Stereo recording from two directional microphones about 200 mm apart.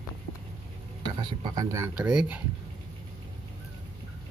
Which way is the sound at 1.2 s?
20° right (ahead or behind).